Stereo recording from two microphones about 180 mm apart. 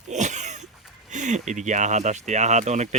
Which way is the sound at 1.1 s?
45° right (ahead or behind).